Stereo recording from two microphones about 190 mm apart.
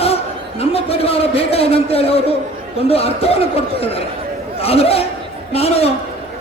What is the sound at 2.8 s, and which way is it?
Speech, 30° left (ahead or behind).